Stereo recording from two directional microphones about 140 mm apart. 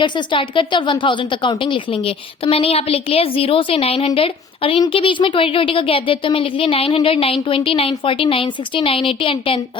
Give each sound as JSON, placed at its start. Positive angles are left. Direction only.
{"t": 0.0, "sound": "a woman's voice", "side_deg": 35}